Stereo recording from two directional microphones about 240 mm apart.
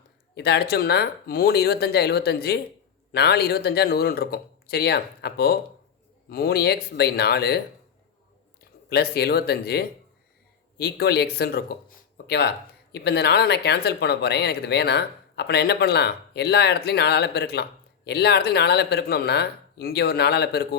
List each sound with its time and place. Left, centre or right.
0.3 s speech: left
8.9 s speech: left